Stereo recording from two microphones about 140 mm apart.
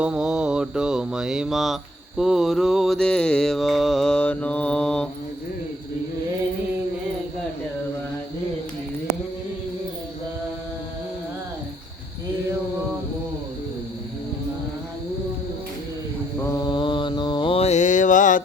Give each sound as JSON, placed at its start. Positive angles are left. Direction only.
{"t": 0.0, "sound": "mantra", "side_deg": -5}
{"t": 16.4, "sound": "mantra", "side_deg": 25}